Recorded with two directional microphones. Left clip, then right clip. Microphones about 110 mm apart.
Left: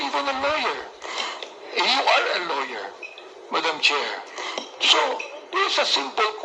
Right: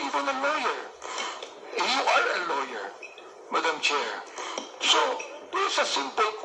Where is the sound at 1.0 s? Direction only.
20° left (ahead or behind).